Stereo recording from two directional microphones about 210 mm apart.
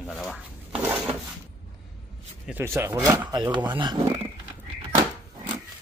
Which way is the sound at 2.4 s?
10° right (ahead or behind).